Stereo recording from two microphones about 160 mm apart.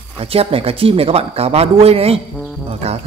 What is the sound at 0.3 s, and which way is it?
Speech, 35° right (ahead or behind).